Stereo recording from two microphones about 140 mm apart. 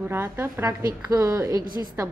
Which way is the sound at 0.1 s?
15° right (ahead or behind).